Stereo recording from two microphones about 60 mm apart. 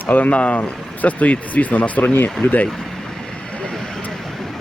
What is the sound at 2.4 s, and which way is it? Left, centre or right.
Speech, left.